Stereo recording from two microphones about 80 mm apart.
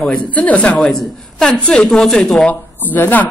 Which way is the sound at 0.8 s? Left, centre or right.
Centre.